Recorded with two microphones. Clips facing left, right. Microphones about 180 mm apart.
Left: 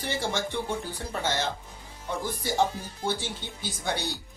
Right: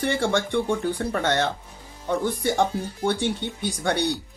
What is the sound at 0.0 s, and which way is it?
Speech, 65° right (ahead or behind).